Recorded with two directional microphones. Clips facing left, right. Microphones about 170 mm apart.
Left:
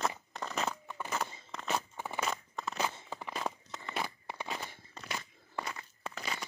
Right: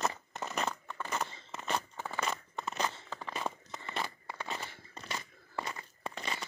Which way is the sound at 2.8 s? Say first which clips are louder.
Left 1 dB; 10° left (ahead or behind).